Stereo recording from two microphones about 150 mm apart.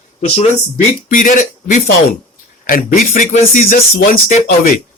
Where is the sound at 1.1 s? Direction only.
60° left (ahead or behind).